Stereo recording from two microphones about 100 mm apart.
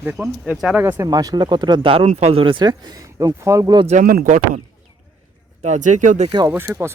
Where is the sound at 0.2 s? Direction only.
5° right (ahead or behind).